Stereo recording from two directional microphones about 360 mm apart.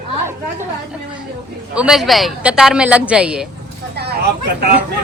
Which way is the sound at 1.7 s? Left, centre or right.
Centre.